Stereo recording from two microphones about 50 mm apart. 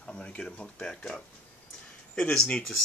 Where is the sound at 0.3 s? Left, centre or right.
Left.